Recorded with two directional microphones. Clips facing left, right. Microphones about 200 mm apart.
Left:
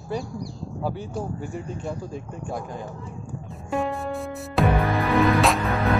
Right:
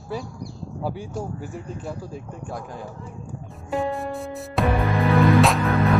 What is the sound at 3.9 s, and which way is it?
Music, centre (ahead or behind).